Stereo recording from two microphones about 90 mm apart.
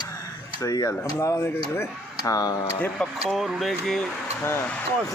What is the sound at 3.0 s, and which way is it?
Speech, centre (ahead or behind).